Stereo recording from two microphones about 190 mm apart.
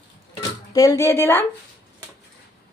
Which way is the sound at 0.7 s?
20° left (ahead or behind).